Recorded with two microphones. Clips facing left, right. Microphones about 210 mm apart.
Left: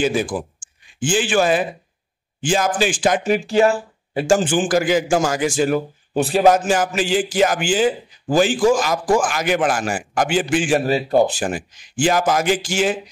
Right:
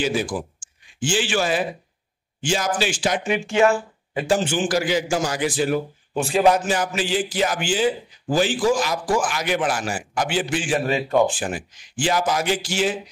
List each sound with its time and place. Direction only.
0.0 s a man's voice: 55° left (ahead or behind)
3.3 s a man's voice: 35° left (ahead or behind)